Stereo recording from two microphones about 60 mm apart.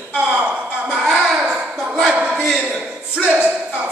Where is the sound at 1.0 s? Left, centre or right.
Centre.